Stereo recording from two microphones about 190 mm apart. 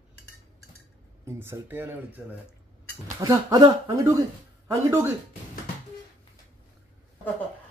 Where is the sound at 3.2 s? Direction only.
20° right (ahead or behind).